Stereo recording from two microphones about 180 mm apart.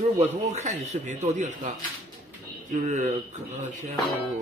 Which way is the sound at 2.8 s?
45° right (ahead or behind).